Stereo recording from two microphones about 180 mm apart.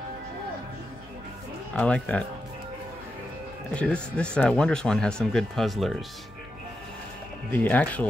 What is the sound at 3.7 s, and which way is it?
Speech, 5° left (ahead or behind).